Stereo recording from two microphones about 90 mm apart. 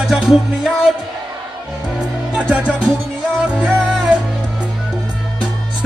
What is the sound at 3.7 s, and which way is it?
Music, 5° left (ahead or behind).